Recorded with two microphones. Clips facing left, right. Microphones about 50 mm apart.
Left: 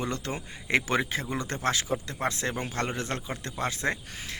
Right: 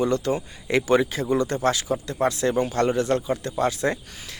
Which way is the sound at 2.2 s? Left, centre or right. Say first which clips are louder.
Right 9 dB; left.